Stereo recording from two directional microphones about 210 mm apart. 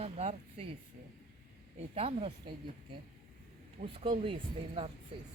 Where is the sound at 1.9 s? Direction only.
25° right (ahead or behind).